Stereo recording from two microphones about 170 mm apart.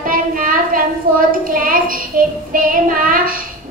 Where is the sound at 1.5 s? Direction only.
55° right (ahead or behind).